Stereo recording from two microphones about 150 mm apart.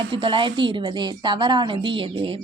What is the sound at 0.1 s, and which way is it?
A woman's voice, 35° right (ahead or behind).